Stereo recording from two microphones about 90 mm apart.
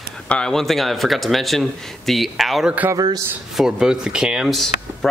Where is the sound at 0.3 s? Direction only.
10° left (ahead or behind).